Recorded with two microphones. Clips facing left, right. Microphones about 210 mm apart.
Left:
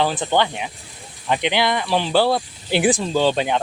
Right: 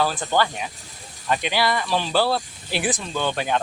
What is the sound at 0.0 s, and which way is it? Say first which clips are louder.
Speech: left 2 dB; 20° left (ahead or behind).